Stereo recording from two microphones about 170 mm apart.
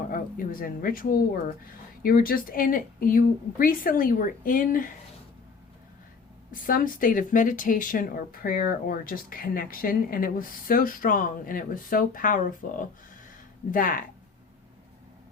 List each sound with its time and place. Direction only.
0.1 s speech: 55° left (ahead or behind)
6.5 s a woman's voice: 55° left (ahead or behind)
13.7 s a woman's voice: 50° left (ahead or behind)